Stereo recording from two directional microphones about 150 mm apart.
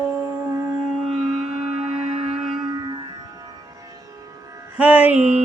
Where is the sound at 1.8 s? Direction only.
40° right (ahead or behind).